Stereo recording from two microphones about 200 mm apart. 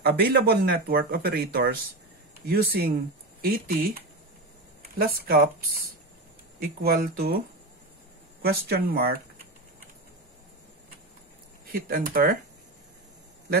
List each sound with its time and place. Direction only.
0.0 s speech: 50° right (ahead or behind)
4.9 s speech: 50° right (ahead or behind)
6.8 s speech: 50° right (ahead or behind)
11.7 s speech: 45° right (ahead or behind)